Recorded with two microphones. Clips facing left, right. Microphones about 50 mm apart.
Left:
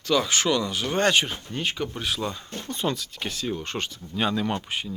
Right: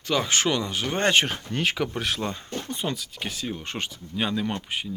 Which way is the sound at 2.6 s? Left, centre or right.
Centre.